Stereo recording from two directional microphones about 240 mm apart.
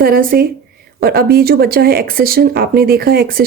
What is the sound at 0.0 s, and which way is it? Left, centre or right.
Speech, right.